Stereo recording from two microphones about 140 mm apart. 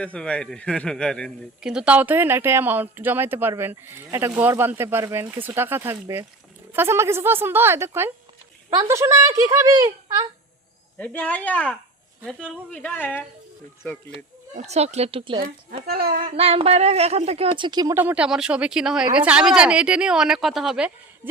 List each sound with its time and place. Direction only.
0.0 s a man's voice: 10° left (ahead or behind)
1.6 s speech: 5° right (ahead or behind); by 10.2 s 25° right (ahead or behind)
10.9 s a man's voice: 10° left (ahead or behind)
14.5 s a sound: 55° right (ahead or behind)
15.9 s speech: 90° right
16.2 s a sound: 45° right (ahead or behind)
17.6 s speech: 30° right (ahead or behind)
17.9 s speech: 10° right (ahead or behind)